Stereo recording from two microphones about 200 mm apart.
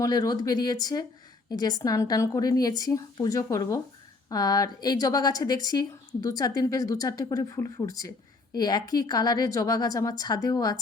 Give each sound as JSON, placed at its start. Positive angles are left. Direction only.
{"t": 0.0, "sound": "a woman's voice", "side_deg": 20}